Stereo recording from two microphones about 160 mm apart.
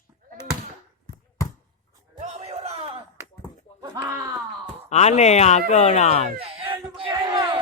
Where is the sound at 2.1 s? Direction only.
45° right (ahead or behind).